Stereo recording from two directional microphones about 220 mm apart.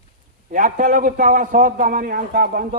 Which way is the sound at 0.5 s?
40° right (ahead or behind).